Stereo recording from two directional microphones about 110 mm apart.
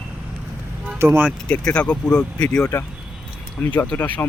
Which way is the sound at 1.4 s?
5° left (ahead or behind).